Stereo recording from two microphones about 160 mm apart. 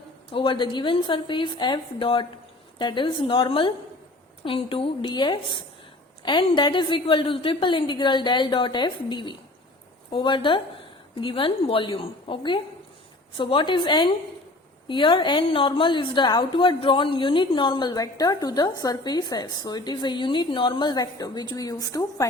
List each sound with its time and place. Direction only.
0.3 s a woman's voice: 30° left (ahead or behind)